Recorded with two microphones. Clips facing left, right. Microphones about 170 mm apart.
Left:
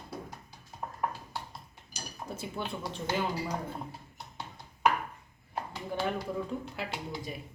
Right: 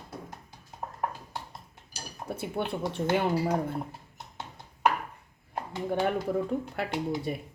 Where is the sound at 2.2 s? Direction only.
60° right (ahead or behind).